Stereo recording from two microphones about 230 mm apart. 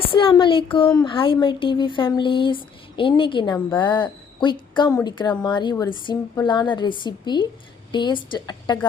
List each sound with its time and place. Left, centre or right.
0.0 s speech: left